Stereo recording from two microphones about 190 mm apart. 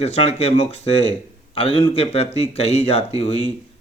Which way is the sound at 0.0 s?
35° left (ahead or behind).